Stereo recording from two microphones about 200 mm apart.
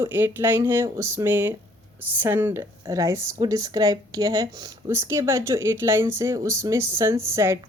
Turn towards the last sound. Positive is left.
turn(degrees=-15)  # may be behind; listen again after turning